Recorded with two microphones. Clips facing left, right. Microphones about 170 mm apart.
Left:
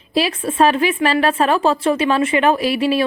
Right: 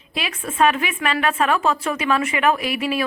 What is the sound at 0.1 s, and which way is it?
Speech, 30° left (ahead or behind).